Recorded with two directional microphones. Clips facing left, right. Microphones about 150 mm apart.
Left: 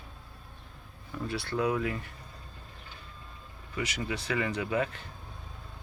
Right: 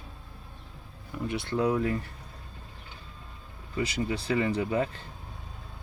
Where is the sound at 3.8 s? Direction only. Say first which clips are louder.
Right 4 dB; 30° right (ahead or behind).